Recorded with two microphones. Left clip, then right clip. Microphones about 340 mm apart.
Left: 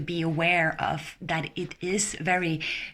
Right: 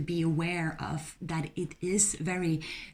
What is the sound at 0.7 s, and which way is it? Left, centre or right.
Speech, centre.